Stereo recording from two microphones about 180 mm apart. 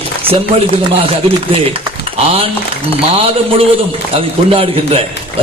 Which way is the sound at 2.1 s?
35° right (ahead or behind).